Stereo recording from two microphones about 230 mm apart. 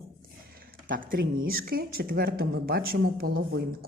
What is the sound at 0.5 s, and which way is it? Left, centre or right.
Speech, right.